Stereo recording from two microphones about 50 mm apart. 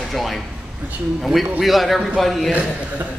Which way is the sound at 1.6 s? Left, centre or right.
Centre.